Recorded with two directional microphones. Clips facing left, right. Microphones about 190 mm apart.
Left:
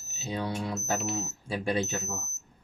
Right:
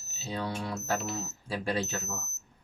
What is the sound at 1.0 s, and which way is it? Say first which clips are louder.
Speech: left 3 dB; centre (ahead or behind).